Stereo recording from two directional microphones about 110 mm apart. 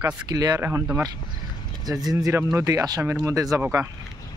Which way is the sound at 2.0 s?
25° right (ahead or behind).